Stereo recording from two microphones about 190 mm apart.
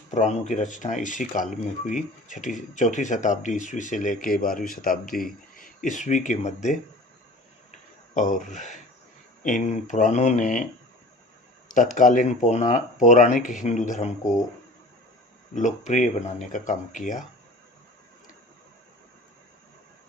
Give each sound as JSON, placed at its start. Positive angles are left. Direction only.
{"t": 0.1, "sound": "speech", "side_deg": 40}
{"t": 8.1, "sound": "speech", "side_deg": 40}
{"t": 11.7, "sound": "speech", "side_deg": 45}
{"t": 15.5, "sound": "speech", "side_deg": 40}